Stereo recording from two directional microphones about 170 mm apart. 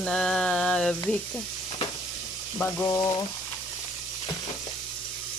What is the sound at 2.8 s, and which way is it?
Frying, 20° left (ahead or behind).